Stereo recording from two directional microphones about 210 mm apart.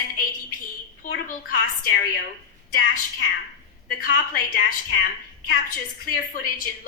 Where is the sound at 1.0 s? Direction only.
45° left (ahead or behind).